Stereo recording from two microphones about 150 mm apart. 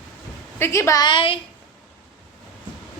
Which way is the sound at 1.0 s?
35° left (ahead or behind).